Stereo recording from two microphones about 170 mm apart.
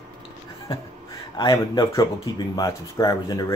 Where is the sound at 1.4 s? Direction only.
25° left (ahead or behind).